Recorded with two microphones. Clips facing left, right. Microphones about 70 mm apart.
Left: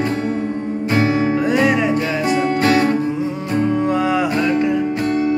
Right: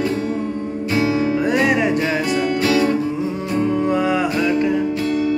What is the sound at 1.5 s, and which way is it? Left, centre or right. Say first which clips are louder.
Music: left 1 dB; centre.